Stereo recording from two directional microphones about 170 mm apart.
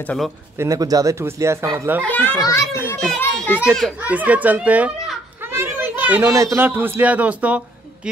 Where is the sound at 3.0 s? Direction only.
5° left (ahead or behind).